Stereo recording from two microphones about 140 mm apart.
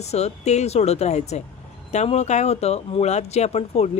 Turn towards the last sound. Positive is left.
turn(degrees=50)  # may be behind; listen again after turning